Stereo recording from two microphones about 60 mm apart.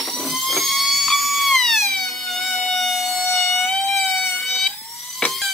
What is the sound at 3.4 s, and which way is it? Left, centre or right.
Music, centre.